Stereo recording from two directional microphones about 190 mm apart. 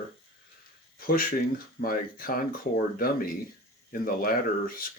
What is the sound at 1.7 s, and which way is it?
Speech, 50° left (ahead or behind).